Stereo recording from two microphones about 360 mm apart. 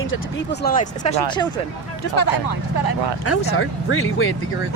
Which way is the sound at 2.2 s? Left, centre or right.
Left.